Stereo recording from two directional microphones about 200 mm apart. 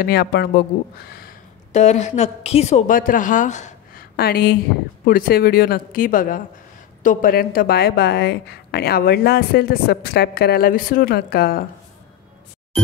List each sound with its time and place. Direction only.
0.0 s speech: 55° left (ahead or behind); by 4.0 s 35° left (ahead or behind)
4.2 s a woman's voice: 50° left (ahead or behind)